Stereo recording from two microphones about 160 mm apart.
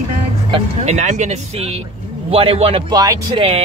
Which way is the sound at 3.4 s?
40° right (ahead or behind).